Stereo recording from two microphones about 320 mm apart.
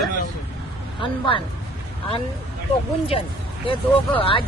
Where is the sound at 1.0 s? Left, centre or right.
Centre.